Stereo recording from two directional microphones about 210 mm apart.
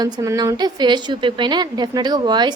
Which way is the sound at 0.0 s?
15° right (ahead or behind).